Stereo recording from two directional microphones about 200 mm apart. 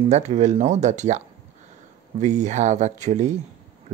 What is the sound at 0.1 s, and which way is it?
Speech, 35° right (ahead or behind).